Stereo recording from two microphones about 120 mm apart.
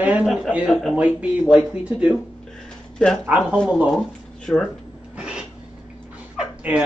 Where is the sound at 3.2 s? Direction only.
15° right (ahead or behind).